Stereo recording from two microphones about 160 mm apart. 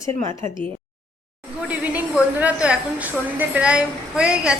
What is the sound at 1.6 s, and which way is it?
A woman's voice, 10° right (ahead or behind).